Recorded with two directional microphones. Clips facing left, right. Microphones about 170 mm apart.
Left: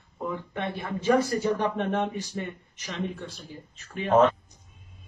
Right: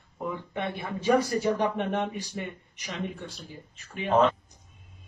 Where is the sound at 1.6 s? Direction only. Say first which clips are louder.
Left 1 dB; 15° right (ahead or behind).